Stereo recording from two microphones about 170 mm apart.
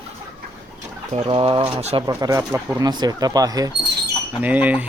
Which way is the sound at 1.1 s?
35° right (ahead or behind).